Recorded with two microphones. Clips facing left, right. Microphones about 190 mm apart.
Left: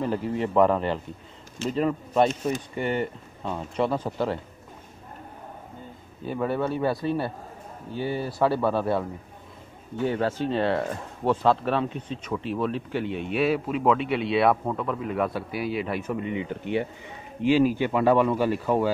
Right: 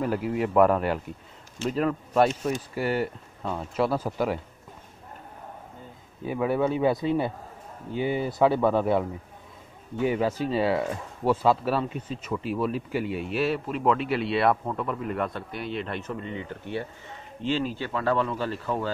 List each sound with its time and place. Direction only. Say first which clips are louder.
0.0 s speech: even; 5° right (ahead or behind)
6.2 s speech: right 2 dB; 5° right (ahead or behind)
10.0 s speech: even; 10° right (ahead or behind); by 18.9 s 15° left (ahead or behind)